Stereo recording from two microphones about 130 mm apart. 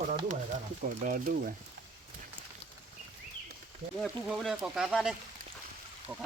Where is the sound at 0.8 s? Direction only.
90° right.